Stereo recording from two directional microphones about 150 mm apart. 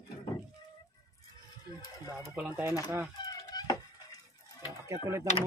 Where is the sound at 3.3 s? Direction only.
25° left (ahead or behind).